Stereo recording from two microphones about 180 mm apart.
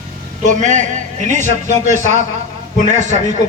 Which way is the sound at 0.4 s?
45° right (ahead or behind).